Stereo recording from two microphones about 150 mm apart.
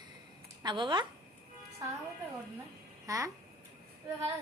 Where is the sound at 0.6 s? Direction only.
30° right (ahead or behind).